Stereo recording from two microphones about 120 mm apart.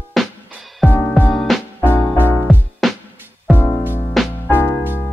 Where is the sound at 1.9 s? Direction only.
20° left (ahead or behind).